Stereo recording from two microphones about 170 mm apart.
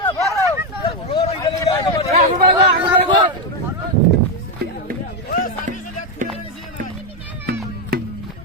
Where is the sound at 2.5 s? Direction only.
30° right (ahead or behind).